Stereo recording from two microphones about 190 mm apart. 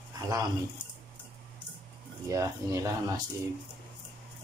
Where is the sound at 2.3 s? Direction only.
15° right (ahead or behind).